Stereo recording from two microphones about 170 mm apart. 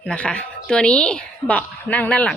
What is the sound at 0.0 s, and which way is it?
A woman's voice, 5° left (ahead or behind).